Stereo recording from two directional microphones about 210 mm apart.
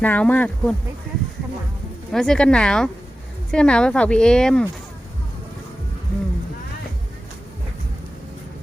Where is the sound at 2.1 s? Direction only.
5° left (ahead or behind).